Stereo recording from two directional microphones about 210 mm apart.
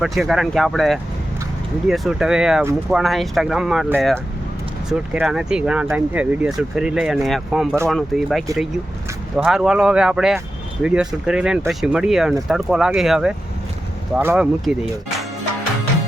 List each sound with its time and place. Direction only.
0.0 s speech: centre (ahead or behind)